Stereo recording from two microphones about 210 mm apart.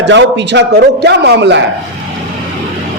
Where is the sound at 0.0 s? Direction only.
60° right (ahead or behind).